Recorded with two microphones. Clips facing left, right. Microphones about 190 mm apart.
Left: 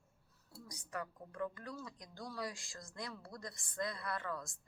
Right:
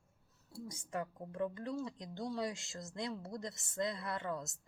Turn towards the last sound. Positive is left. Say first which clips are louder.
# right 2 dB
turn(degrees=-25)  # may be behind; listen again after turning